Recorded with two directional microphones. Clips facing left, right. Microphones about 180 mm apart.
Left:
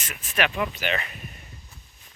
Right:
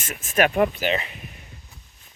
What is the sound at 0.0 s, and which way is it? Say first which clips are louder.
Speech: right 6 dB; 45° right (ahead or behind).